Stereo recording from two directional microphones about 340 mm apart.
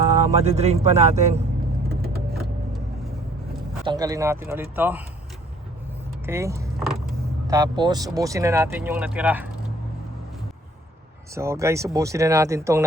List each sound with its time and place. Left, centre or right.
0.4 s a man's voice: centre
3.8 s speech: centre
6.2 s vehicle: centre
7.1 s speech: centre
11.3 s speech: centre